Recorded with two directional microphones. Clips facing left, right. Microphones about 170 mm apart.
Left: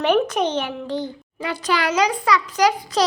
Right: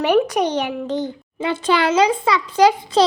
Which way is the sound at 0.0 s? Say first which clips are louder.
Right 2 dB; 10° right (ahead or behind).